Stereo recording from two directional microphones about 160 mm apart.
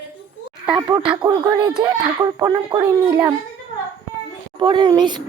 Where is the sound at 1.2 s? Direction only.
30° right (ahead or behind).